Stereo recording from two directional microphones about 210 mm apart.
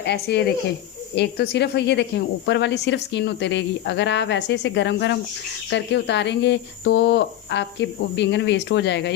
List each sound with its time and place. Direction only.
0.0 s speech: 55° left (ahead or behind)